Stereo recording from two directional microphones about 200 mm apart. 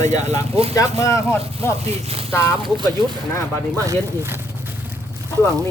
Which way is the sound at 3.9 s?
10° right (ahead or behind).